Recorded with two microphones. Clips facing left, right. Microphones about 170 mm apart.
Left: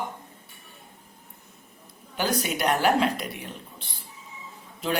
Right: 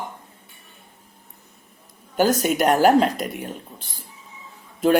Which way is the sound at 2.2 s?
45° right (ahead or behind).